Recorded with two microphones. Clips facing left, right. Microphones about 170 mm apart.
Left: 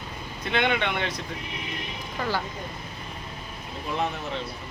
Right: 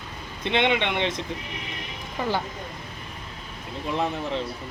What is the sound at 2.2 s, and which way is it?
Speech, 20° right (ahead or behind).